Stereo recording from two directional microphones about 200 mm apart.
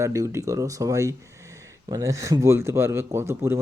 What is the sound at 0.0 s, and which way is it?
Speech, 15° right (ahead or behind).